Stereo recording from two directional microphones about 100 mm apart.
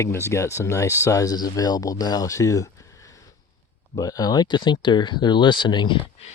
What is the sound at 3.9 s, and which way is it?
Speech, 40° left (ahead or behind).